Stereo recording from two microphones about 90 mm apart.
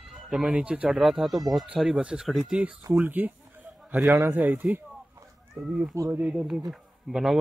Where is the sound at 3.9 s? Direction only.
25° right (ahead or behind).